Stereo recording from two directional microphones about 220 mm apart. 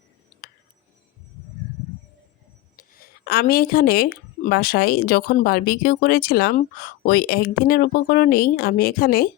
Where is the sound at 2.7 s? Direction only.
40° left (ahead or behind).